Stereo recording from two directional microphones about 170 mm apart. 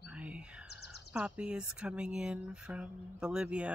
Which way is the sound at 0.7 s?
75° left (ahead or behind).